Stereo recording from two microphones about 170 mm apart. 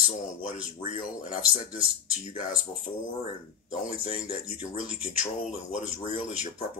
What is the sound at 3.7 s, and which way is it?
Speech, 45° left (ahead or behind).